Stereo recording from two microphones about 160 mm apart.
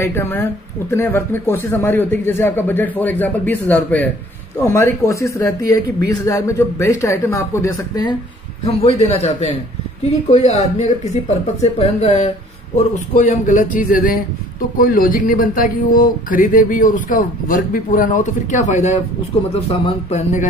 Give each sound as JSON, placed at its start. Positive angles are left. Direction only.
{"t": 0.0, "sound": "speech", "side_deg": 15}
{"t": 8.6, "sound": "a man's voice", "side_deg": 40}